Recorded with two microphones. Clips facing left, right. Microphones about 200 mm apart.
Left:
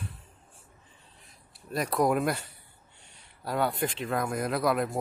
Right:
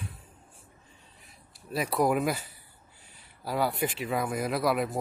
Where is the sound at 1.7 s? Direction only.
Centre (ahead or behind).